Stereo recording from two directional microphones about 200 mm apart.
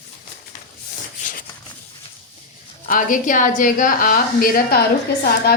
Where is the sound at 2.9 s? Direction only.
40° left (ahead or behind).